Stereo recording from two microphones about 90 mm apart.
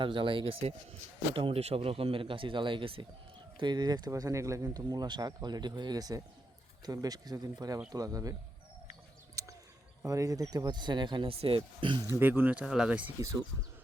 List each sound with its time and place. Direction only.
0.0 s speech: 70° right (ahead or behind)
1.3 s speech: 90° right
3.6 s speech: 55° right (ahead or behind)
4.1 s speech: 35° right (ahead or behind)
9.4 s a sound: 35° right (ahead or behind)
10.0 s speech: 35° right (ahead or behind)
10.5 s speech: 50° right (ahead or behind); by 12.0 s 65° right (ahead or behind)
12.2 s speech: 20° right (ahead or behind)